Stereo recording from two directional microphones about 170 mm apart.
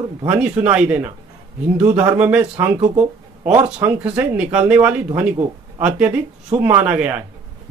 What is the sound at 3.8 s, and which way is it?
Speech, 15° right (ahead or behind).